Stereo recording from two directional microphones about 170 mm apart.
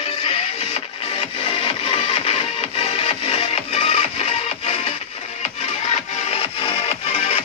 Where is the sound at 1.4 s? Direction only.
35° left (ahead or behind).